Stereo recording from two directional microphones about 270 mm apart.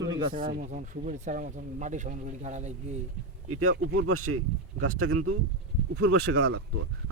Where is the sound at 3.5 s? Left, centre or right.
Right.